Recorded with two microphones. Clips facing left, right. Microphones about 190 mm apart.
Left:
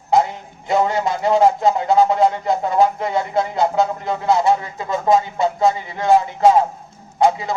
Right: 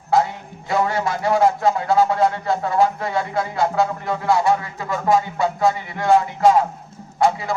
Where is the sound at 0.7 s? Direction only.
20° left (ahead or behind).